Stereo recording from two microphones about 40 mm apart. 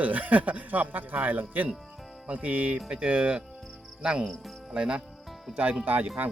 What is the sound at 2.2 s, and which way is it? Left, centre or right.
Speech, right.